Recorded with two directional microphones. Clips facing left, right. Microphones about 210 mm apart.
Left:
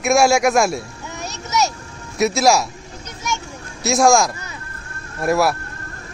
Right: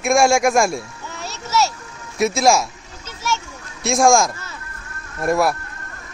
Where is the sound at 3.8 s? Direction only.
Centre (ahead or behind).